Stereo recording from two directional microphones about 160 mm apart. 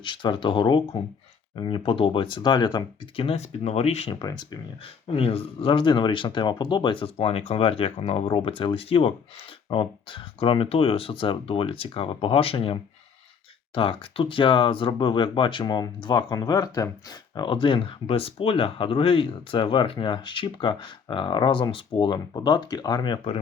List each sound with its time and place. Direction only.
0.0 s speech: 30° left (ahead or behind)
4.2 s speech: 25° left (ahead or behind)
5.1 s speech: 35° left (ahead or behind)